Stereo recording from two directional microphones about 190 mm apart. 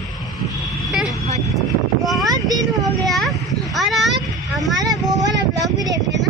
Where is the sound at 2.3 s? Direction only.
20° right (ahead or behind).